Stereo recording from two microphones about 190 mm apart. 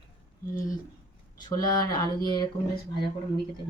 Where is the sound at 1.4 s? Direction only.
20° left (ahead or behind).